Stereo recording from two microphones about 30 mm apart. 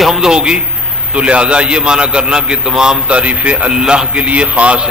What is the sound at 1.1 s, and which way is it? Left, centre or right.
A man's voice, right.